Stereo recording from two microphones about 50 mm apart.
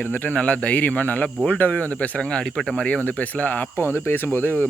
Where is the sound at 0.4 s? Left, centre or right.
Left.